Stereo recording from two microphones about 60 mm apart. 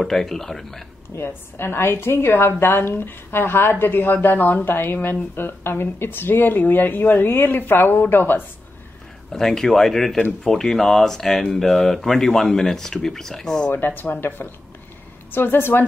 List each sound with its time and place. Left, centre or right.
0.0 s speech: centre
1.1 s a woman's voice: left
9.3 s speech: centre
13.7 s a woman's voice: left